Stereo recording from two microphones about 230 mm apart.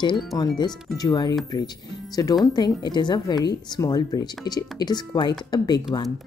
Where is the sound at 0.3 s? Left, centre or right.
Centre.